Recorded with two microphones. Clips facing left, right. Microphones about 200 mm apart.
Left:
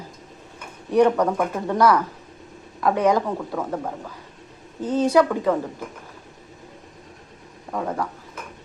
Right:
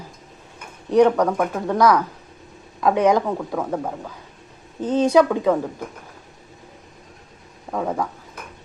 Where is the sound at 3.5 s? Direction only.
5° right (ahead or behind).